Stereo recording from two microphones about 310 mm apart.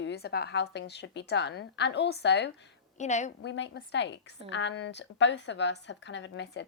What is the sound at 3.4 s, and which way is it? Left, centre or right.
A woman's voice, left.